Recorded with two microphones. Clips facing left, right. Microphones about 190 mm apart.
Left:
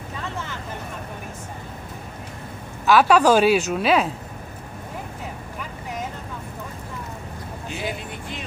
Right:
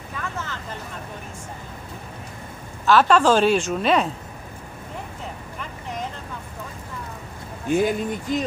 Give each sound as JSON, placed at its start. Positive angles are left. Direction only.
{"t": 2.9, "sound": "a woman's voice", "side_deg": 10}
{"t": 5.6, "sound": "vehicle", "side_deg": 5}
{"t": 7.6, "sound": "speech", "side_deg": -50}